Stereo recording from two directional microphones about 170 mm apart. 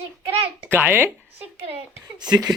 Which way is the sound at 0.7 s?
10° right (ahead or behind).